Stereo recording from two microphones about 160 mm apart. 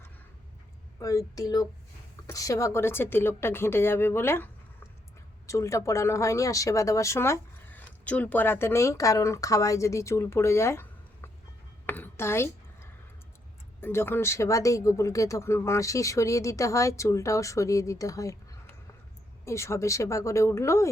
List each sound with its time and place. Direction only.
0.9 s speech: 20° left (ahead or behind)
5.5 s speech: 20° left (ahead or behind)
11.9 s a sound: 10° left (ahead or behind)
13.8 s speech: 15° left (ahead or behind)
19.5 s speech: 15° left (ahead or behind)